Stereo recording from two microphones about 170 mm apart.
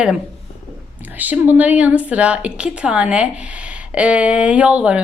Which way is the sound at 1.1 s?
10° right (ahead or behind).